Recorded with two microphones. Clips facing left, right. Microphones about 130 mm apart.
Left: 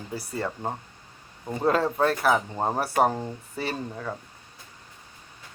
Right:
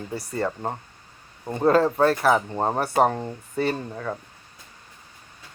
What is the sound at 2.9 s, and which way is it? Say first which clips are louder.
Speech: right 2 dB; 30° right (ahead or behind).